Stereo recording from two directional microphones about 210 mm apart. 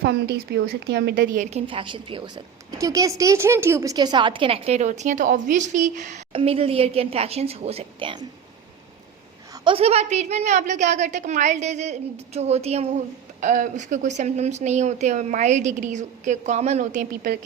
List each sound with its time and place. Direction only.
0.0 s a woman's voice: 50° right (ahead or behind)
1.5 s a woman's voice: 25° right (ahead or behind)
9.6 s speech: 30° right (ahead or behind)